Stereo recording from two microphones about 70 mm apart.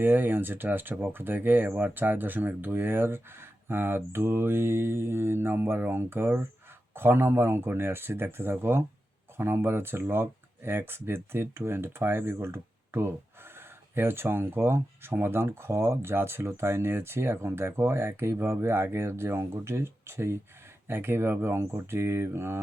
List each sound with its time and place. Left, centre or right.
0.0 s speech: right